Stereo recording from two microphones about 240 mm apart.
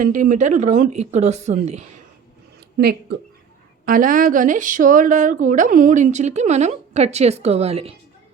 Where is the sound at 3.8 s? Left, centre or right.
Right.